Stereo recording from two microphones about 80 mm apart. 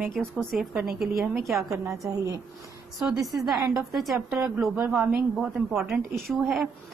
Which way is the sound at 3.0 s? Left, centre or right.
Centre.